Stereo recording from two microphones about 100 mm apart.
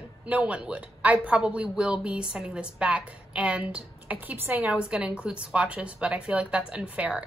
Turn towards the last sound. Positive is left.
turn(degrees=-15)  # may be behind; listen again after turning